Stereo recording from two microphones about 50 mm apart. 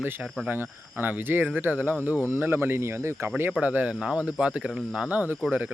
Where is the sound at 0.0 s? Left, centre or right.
Right.